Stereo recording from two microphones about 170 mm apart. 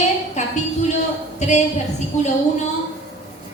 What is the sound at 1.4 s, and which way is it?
Speech, 45° left (ahead or behind).